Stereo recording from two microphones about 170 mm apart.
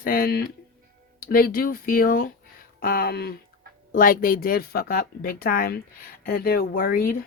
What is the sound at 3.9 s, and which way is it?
Speech, 55° left (ahead or behind).